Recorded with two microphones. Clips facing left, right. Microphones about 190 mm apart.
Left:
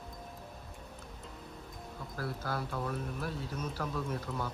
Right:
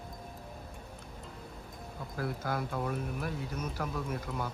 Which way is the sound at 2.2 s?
15° right (ahead or behind).